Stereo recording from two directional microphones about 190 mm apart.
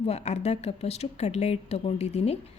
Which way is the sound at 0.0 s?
35° left (ahead or behind).